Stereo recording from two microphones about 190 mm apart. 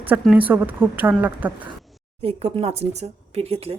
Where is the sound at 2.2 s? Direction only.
30° right (ahead or behind).